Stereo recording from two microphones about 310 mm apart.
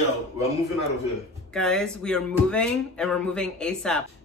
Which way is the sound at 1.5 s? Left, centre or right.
Centre.